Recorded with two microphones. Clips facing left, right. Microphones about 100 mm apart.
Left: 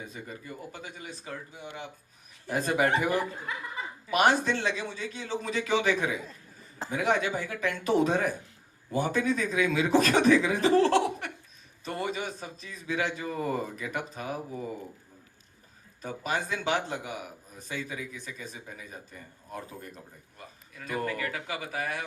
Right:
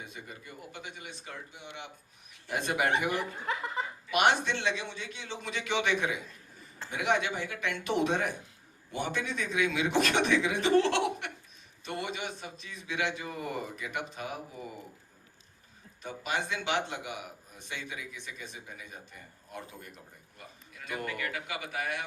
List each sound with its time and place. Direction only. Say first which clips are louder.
0.7 s a man's voice: left 2 dB; 40° left (ahead or behind)
16.0 s a man's voice: left 2 dB; 40° left (ahead or behind)
20.8 s a man's voice: left 4 dB; 40° left (ahead or behind)